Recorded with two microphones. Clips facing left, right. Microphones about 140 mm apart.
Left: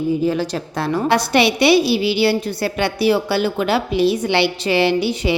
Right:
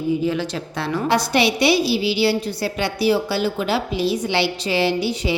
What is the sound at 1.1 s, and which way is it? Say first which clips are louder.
A woman's voice: left 2 dB; 60° left (ahead or behind).